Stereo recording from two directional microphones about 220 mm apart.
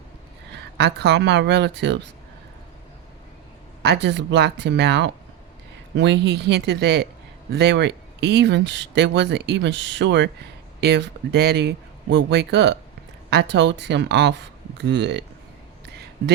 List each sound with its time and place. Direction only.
0.5 s speech: 50° right (ahead or behind)
3.8 s speech: 50° right (ahead or behind)